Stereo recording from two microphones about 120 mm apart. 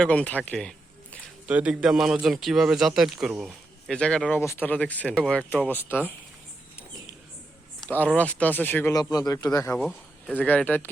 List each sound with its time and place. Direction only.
0.0 s speech: 10° left (ahead or behind)
1.5 s a man's voice: 10° right (ahead or behind); by 4.4 s 5° left (ahead or behind)
4.4 s speech: 20° left (ahead or behind)
7.9 s speech: 15° left (ahead or behind)
8.9 s a man's voice: 35° left (ahead or behind)
9.7 s speech: 5° left (ahead or behind)